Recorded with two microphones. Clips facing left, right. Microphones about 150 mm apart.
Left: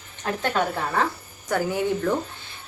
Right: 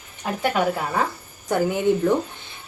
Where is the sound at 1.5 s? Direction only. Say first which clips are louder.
Right 2 dB; 20° right (ahead or behind).